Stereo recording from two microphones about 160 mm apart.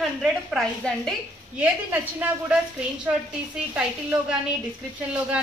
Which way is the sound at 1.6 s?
10° right (ahead or behind).